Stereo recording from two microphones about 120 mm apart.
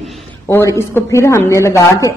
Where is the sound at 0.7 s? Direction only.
25° left (ahead or behind).